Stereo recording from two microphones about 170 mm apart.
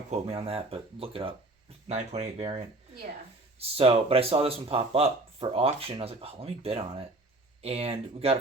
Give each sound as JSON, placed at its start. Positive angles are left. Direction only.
{"t": 0.1, "sound": "speech", "side_deg": -35}
{"t": 3.6, "sound": "speech", "side_deg": -35}